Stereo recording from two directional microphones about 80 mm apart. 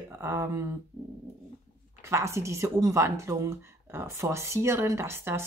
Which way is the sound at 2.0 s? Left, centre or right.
Right.